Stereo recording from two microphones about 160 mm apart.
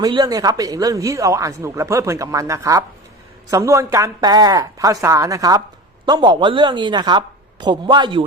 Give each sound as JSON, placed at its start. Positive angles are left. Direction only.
{"t": 0.0, "sound": "speech", "side_deg": -25}